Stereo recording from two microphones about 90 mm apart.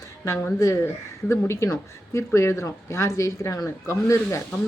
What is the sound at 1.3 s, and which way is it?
Speech, 30° left (ahead or behind).